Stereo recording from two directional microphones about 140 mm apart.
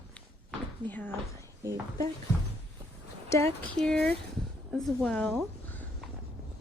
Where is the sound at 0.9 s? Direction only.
10° left (ahead or behind).